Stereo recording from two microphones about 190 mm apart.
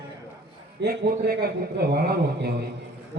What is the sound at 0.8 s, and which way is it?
A man's voice, 65° right (ahead or behind).